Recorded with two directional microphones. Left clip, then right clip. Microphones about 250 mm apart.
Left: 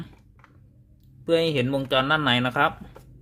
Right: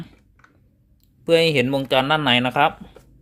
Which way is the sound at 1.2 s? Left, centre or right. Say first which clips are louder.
Right 5 dB; centre.